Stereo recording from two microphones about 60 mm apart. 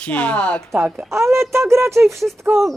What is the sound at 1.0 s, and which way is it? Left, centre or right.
Speech, right.